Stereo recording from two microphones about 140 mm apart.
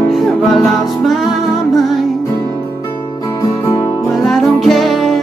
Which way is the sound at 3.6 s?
20° left (ahead or behind).